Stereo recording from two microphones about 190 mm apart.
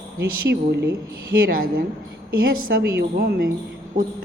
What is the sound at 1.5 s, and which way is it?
Music, 50° right (ahead or behind).